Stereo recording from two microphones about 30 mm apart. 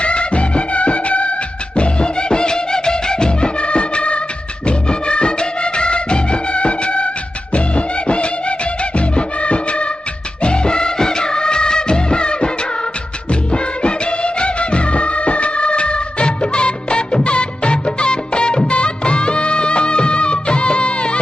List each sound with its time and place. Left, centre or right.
0.0 s music of bollywood: left
4.6 s music: left
10.4 s music of bollywood: left
13.5 s music of bollywood: left